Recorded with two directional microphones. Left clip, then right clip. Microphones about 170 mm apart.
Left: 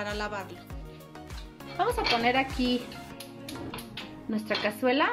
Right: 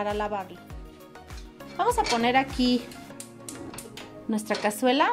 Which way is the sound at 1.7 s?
75° right (ahead or behind).